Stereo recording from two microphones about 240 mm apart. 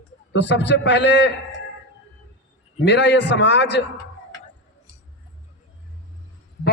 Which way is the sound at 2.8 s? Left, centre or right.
Left.